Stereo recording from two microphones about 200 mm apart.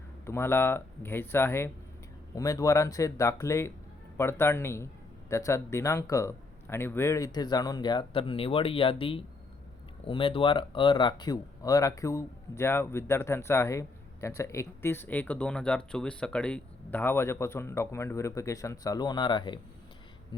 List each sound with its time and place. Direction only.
0.3 s speech: 10° left (ahead or behind)